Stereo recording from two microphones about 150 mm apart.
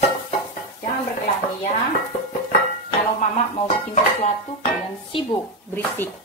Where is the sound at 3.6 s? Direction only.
55° left (ahead or behind).